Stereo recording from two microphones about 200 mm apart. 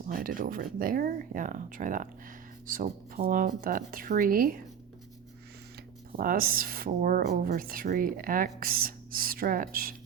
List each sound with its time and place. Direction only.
0.0 s speech: 45° right (ahead or behind)
6.1 s speech: 45° right (ahead or behind)